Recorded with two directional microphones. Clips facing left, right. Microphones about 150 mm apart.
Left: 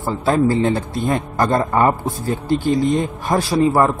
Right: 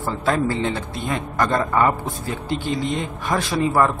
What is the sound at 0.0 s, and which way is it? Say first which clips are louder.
A man's voice: left 4 dB; 30° left (ahead or behind).